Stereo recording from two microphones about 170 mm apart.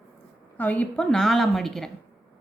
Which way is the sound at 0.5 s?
10° left (ahead or behind).